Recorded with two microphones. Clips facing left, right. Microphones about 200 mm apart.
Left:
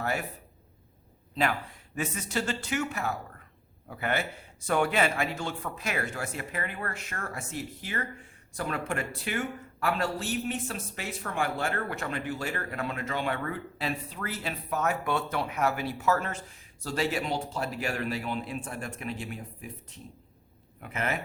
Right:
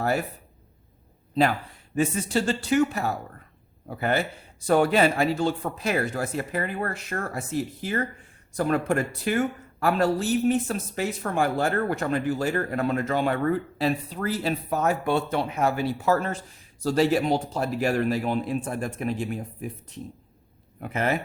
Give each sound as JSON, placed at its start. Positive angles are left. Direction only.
{"t": 0.0, "sound": "speech", "side_deg": -40}
{"t": 2.0, "sound": "speech", "side_deg": -30}
{"t": 20.8, "sound": "speech", "side_deg": -35}